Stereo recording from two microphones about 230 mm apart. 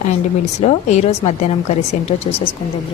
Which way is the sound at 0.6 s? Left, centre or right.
Left.